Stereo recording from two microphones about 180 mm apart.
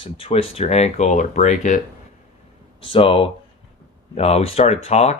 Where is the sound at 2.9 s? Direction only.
30° left (ahead or behind).